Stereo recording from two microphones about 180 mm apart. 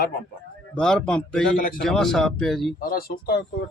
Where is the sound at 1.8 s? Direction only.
Centre (ahead or behind).